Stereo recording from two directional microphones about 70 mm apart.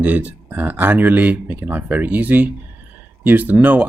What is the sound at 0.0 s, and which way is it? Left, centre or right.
Speech, right.